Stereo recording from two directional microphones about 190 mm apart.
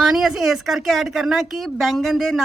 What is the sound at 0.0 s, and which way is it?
Speech, centre (ahead or behind).